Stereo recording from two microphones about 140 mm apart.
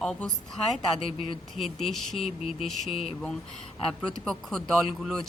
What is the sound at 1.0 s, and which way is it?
Speech, 40° left (ahead or behind).